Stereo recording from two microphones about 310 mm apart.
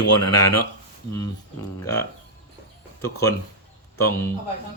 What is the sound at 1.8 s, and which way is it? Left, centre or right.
Speech, centre.